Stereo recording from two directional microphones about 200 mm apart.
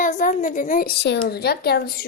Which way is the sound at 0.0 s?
40° left (ahead or behind).